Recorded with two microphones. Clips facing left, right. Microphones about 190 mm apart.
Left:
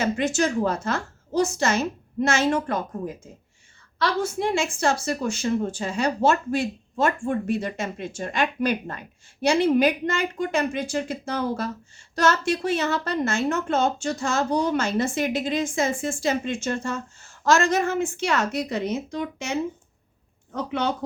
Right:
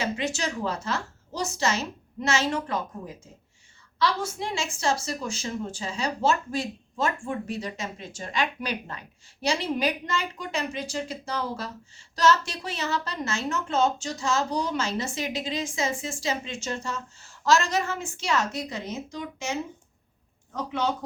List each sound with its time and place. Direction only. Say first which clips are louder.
0.0 s a woman's voice: left 6 dB; 50° left (ahead or behind)